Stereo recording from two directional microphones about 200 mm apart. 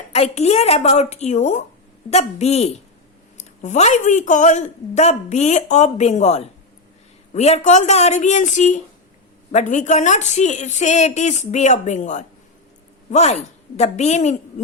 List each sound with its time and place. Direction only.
0.1 s a woman's voice: 30° left (ahead or behind)